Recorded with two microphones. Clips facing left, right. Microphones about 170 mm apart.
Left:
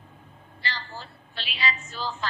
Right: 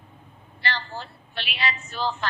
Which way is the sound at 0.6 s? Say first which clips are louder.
Right 5 dB; 65° right (ahead or behind).